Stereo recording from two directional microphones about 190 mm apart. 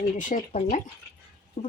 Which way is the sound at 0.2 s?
40° left (ahead or behind).